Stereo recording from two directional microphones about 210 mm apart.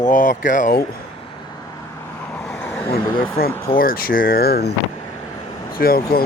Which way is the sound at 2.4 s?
5° left (ahead or behind).